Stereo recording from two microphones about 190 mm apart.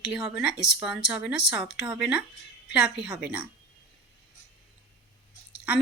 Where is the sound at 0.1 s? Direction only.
5° right (ahead or behind).